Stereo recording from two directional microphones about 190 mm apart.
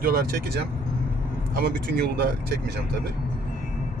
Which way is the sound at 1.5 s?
55° right (ahead or behind).